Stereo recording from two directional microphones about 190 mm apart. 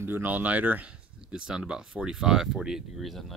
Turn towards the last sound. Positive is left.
turn(degrees=0)  # may be behind; listen again after turning